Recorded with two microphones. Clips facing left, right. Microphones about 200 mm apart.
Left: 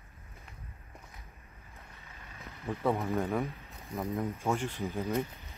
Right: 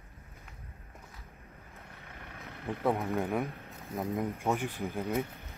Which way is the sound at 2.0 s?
65° right (ahead or behind).